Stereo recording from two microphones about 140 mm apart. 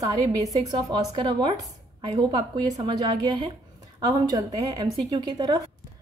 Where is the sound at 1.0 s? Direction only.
35° right (ahead or behind).